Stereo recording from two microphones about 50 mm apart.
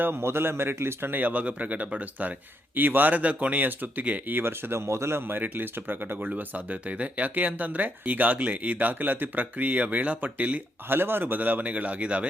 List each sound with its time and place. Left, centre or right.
0.0 s a man's voice: right
1.1 s speech: right
4.4 s a man's voice: right
4.9 s speech: right
5.3 s speech: right
6.2 s speech: right
10.8 s speech: right
11.7 s speech: right